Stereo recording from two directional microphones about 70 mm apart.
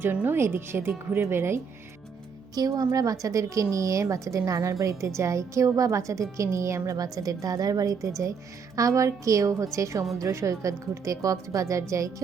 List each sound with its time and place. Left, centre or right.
0.0 s a woman's voice: right
2.6 s a woman's voice: right
6.9 s a woman's voice: right